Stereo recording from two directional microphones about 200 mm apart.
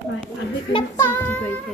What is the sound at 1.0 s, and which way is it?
Speech, 10° left (ahead or behind).